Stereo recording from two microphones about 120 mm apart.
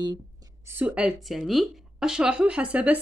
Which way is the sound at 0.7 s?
15° right (ahead or behind).